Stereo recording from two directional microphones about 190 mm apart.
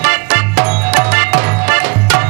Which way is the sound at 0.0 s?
15° right (ahead or behind).